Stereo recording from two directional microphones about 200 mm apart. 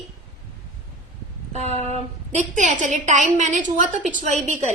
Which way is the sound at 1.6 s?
35° right (ahead or behind).